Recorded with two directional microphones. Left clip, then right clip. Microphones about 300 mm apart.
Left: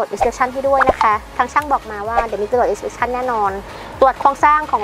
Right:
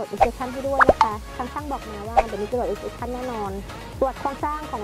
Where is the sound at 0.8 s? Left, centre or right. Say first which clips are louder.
Right 1 dB; centre.